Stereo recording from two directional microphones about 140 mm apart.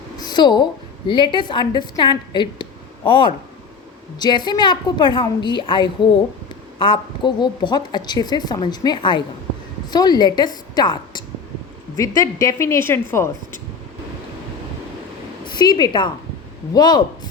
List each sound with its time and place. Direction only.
0.2 s a woman's voice: 30° left (ahead or behind)
15.5 s a woman's voice: 30° left (ahead or behind)